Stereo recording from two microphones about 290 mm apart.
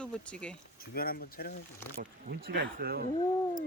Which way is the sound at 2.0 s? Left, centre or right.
Right.